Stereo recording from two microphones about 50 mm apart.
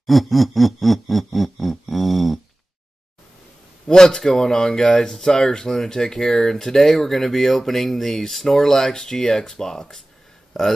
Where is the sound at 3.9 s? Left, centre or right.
Centre.